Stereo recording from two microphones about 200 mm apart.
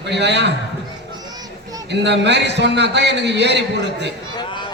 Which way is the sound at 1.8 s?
60° right (ahead or behind).